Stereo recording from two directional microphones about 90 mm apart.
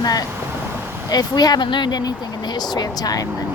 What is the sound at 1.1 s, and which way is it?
Speech, 50° left (ahead or behind).